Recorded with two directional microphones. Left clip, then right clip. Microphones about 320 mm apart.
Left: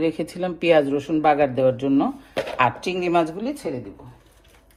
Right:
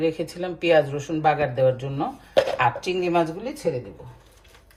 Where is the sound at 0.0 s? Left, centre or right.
Centre.